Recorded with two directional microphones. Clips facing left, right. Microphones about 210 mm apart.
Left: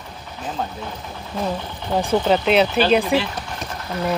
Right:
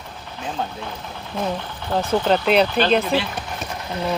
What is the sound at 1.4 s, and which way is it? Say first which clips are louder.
Speech: even; centre (ahead or behind).